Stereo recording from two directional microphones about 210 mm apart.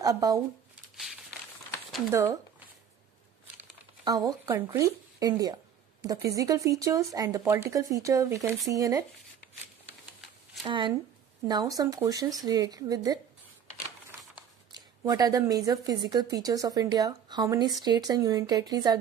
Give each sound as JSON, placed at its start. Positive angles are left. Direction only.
{"t": 0.0, "sound": "speech", "side_deg": -15}
{"t": 4.0, "sound": "speech", "side_deg": -15}
{"t": 10.6, "sound": "speech", "side_deg": -25}
{"t": 14.1, "sound": "a sound", "side_deg": -10}
{"t": 14.7, "sound": "a woman's voice", "side_deg": -20}